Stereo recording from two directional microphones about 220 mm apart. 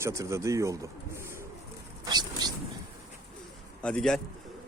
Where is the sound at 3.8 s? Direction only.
5° left (ahead or behind).